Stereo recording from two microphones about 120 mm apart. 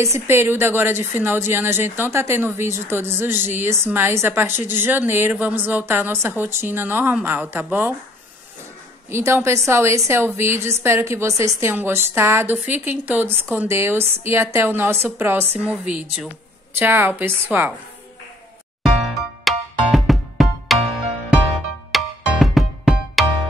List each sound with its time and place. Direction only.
0.0 s a woman's voice: 20° right (ahead or behind)
9.1 s a woman's voice: 20° right (ahead or behind)
19.4 s music: centre (ahead or behind)
21.9 s music: centre (ahead or behind)